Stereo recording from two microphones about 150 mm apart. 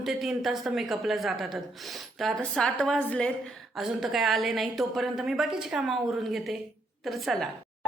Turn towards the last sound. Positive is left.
turn(degrees=0)  # may be behind; listen again after turning